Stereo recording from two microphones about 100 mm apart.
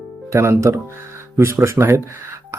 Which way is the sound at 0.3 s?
25° right (ahead or behind).